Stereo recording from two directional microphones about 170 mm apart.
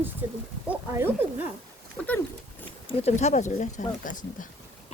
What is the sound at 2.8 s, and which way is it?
Speech, 35° left (ahead or behind).